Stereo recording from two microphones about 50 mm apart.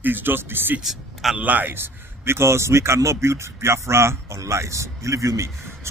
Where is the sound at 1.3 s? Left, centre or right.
Right.